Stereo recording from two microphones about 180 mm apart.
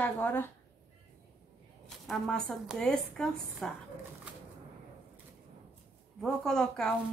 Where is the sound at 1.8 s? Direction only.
Centre (ahead or behind).